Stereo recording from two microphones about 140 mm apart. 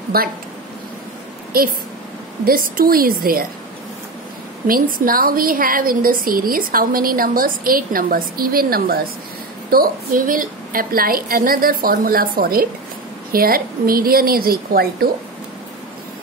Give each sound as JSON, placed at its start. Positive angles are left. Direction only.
{"t": 0.1, "sound": "a woman's voice", "side_deg": -90}
{"t": 1.5, "sound": "a woman's voice", "side_deg": -90}
{"t": 4.6, "sound": "a woman's voice", "side_deg": -90}